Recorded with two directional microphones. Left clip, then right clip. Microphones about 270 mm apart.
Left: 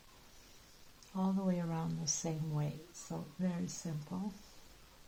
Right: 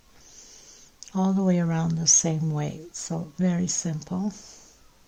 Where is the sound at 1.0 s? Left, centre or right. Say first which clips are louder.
Right 12 dB; right.